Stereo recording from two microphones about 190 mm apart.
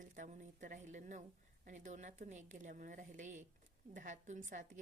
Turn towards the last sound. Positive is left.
turn(degrees=-40)  # may be behind; listen again after turning